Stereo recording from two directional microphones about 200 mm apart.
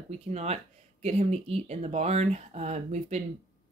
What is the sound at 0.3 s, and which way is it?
Speech, 35° right (ahead or behind).